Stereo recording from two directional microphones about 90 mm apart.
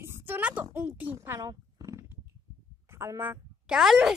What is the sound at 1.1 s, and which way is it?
Roaring cats, 35° right (ahead or behind).